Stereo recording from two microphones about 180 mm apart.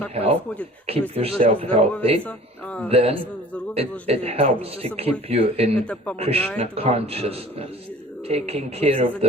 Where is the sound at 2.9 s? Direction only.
35° right (ahead or behind).